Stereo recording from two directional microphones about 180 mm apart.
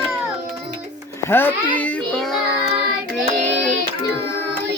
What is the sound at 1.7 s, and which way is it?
Child singing, 5° left (ahead or behind).